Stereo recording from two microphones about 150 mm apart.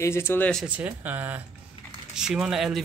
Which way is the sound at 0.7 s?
10° right (ahead or behind).